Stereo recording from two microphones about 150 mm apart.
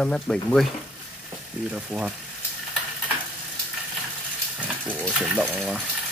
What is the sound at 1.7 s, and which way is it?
Speech, 5° right (ahead or behind).